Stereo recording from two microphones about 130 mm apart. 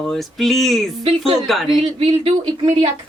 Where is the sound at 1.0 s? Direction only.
45° right (ahead or behind).